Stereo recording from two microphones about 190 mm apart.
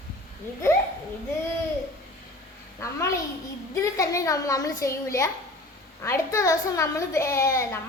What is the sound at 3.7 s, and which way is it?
A woman's voice, 15° left (ahead or behind).